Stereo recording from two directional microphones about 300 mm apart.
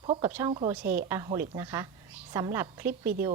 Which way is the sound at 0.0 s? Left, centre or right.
Centre.